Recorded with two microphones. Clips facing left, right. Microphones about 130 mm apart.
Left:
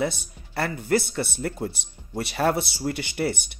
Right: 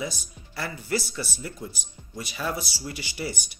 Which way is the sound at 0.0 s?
60° left (ahead or behind).